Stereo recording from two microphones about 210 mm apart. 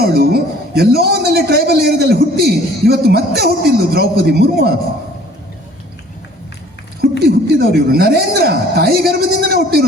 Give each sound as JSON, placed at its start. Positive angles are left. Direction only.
{"t": 0.0, "sound": "a man's voice", "side_deg": -45}
{"t": 7.2, "sound": "a man's voice", "side_deg": -45}